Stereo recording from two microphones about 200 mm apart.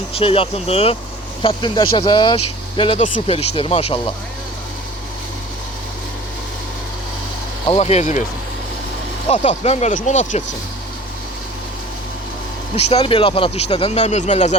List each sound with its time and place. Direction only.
0.1 s speech: 30° left (ahead or behind)
7.7 s speech: 30° left (ahead or behind)
9.3 s speech: 35° left (ahead or behind)
12.7 s speech: 30° left (ahead or behind)